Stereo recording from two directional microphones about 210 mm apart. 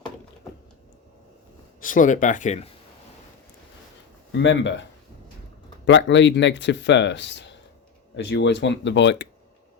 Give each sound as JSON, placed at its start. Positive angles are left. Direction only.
{"t": 1.8, "sound": "speech", "side_deg": 40}
{"t": 4.3, "sound": "speech", "side_deg": 60}